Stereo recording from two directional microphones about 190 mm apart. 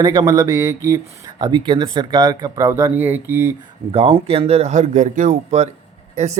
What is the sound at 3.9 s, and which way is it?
Speech, 25° right (ahead or behind).